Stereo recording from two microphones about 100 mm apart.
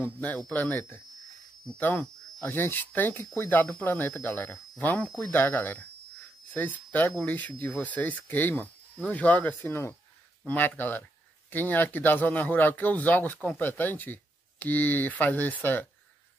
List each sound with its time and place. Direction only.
0.0 s speech: 15° left (ahead or behind)